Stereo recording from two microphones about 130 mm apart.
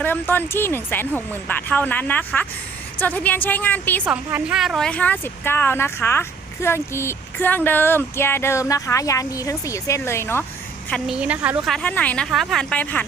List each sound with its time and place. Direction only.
0.0 s speech: 15° left (ahead or behind)
4.0 s a woman's voice: 10° right (ahead or behind)
4.9 s speech: 10° left (ahead or behind)
11.0 s a woman's voice: 5° right (ahead or behind)
11.7 s speech: 10° left (ahead or behind)